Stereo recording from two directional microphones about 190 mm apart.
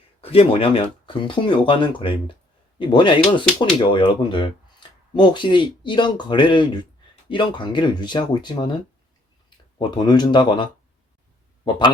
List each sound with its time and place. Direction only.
0.2 s speech: 30° left (ahead or behind)
9.7 s speech: 25° left (ahead or behind)